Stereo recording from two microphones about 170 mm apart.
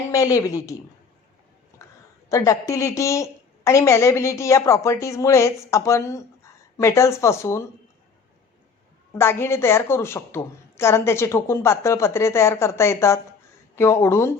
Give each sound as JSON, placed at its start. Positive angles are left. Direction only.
{"t": 0.1, "sound": "speech", "side_deg": 20}
{"t": 1.8, "sound": "a sound", "side_deg": 15}
{"t": 2.3, "sound": "a woman's voice", "side_deg": 20}
{"t": 9.1, "sound": "a woman's voice", "side_deg": 15}